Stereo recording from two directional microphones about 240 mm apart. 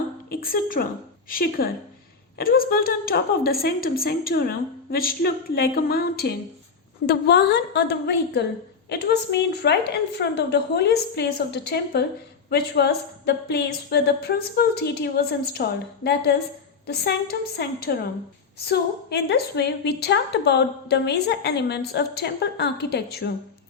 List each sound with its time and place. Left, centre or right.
0.3 s a woman's voice: left